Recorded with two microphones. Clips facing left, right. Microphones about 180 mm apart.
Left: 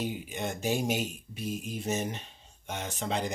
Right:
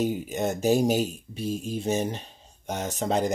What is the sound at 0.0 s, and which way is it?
Speech, 45° right (ahead or behind).